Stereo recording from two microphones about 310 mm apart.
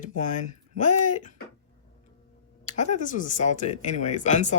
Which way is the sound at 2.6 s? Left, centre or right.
Left.